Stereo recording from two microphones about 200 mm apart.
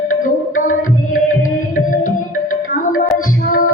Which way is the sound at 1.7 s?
40° left (ahead or behind).